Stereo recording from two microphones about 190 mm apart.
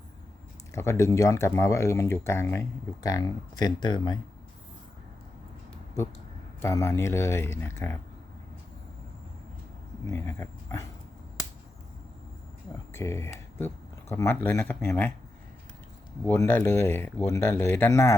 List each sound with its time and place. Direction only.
0.7 s speech: 15° left (ahead or behind)
6.6 s speech: 15° left (ahead or behind)
10.1 s speech: 15° left (ahead or behind)
12.9 s a sound: 15° left (ahead or behind)
14.1 s speech: 15° left (ahead or behind)
16.2 s speech: 10° left (ahead or behind)